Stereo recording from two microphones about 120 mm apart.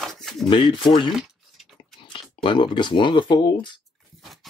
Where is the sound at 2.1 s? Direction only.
45° left (ahead or behind).